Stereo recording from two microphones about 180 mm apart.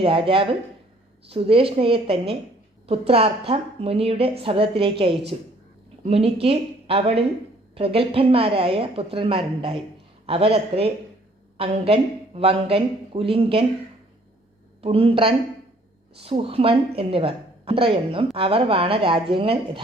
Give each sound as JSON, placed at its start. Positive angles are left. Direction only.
{"t": 0.0, "sound": "a woman's voice", "side_deg": -30}
{"t": 14.8, "sound": "a woman's voice", "side_deg": -30}